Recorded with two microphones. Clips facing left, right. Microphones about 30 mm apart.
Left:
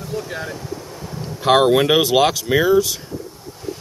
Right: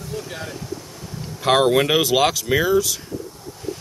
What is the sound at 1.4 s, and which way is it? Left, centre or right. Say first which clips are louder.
Speech: left 2 dB; centre.